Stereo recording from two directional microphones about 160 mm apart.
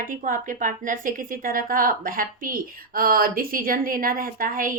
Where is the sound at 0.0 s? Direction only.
55° right (ahead or behind).